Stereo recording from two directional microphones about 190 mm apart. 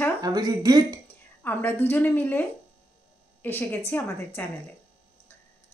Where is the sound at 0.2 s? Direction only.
20° right (ahead or behind).